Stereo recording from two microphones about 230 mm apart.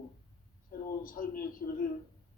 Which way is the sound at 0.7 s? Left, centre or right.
Left.